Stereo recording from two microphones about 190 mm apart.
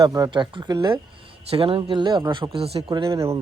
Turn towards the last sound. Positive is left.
turn(degrees=-15)  # may be behind; listen again after turning